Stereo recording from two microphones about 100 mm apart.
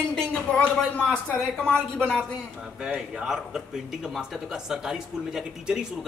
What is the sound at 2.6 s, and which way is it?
Speech, 10° right (ahead or behind).